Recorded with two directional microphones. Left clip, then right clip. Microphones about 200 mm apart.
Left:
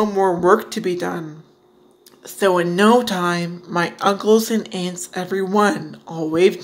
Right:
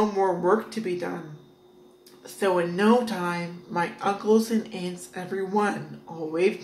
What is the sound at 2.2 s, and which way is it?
Speech, 45° left (ahead or behind).